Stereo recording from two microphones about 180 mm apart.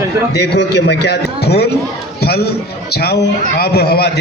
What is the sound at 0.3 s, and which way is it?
A man's voice, 65° left (ahead or behind).